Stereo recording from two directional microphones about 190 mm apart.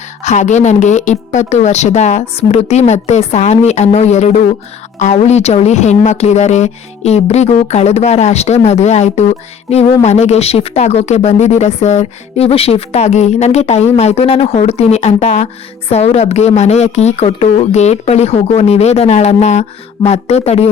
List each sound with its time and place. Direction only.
0.2 s speech: 40° left (ahead or behind)